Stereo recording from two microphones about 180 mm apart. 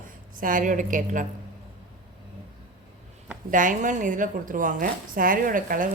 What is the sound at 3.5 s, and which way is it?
A woman's voice, 45° right (ahead or behind).